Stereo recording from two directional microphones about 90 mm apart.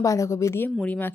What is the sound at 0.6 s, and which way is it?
Speech, 20° left (ahead or behind).